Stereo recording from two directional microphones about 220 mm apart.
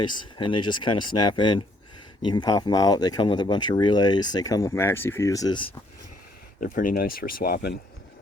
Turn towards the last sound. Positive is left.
turn(degrees=45)  # may be behind; listen again after turning